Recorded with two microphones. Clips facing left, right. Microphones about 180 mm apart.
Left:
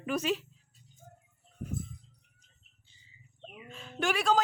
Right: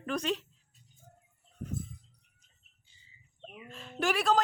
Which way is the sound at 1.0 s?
50° left (ahead or behind).